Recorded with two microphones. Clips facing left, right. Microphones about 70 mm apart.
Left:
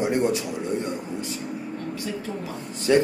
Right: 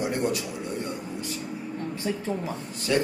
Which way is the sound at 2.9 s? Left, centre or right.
Left.